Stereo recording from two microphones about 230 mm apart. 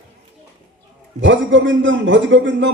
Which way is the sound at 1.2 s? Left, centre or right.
Right.